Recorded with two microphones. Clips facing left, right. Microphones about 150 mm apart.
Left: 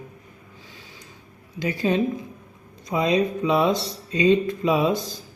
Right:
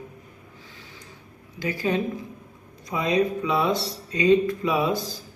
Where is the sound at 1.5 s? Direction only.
20° left (ahead or behind).